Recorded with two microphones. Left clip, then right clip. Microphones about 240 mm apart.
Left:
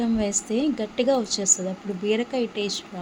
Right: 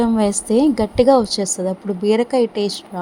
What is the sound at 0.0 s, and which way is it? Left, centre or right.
Speech, right.